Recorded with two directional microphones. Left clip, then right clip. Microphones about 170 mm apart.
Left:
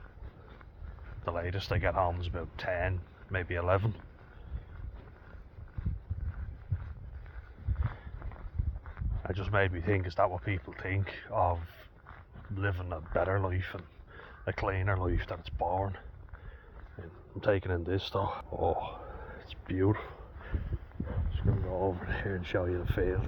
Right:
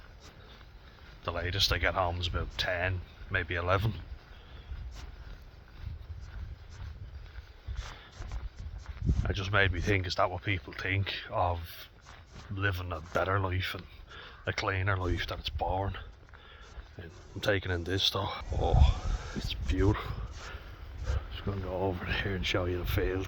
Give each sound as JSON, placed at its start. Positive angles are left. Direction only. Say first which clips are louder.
{"t": 1.2, "sound": "speech", "louder": "right 5 dB", "side_deg": -15}
{"t": 9.2, "sound": "speech", "louder": "right 2 dB", "side_deg": -20}
{"t": 17.0, "sound": "speech", "louder": "right 1 dB", "side_deg": -15}
{"t": 21.1, "sound": "speech", "louder": "right 1 dB", "side_deg": -35}